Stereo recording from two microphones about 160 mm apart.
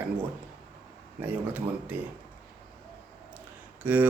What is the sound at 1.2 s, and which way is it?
Speech, 10° right (ahead or behind).